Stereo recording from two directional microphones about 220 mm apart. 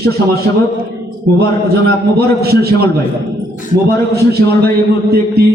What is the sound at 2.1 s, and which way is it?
Speech, 45° right (ahead or behind).